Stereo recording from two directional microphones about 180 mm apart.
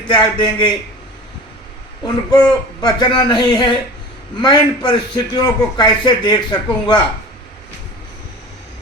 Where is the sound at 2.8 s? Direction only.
20° left (ahead or behind).